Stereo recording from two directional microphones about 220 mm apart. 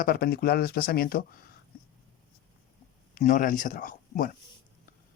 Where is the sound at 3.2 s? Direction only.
35° left (ahead or behind).